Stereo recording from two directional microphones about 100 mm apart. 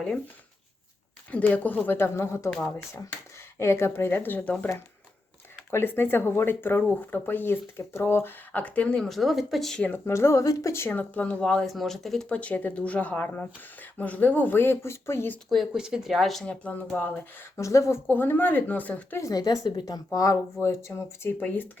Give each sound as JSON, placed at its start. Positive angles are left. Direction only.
{"t": 1.3, "sound": "speech", "side_deg": 15}
{"t": 5.7, "sound": "speech", "side_deg": 20}
{"t": 9.0, "sound": "speech", "side_deg": 0}
{"t": 10.1, "sound": "speech", "side_deg": 30}
{"t": 15.4, "sound": "speech", "side_deg": -5}
{"t": 17.6, "sound": "speech", "side_deg": 30}
{"t": 19.2, "sound": "speech", "side_deg": 40}
{"t": 20.1, "sound": "speech", "side_deg": 35}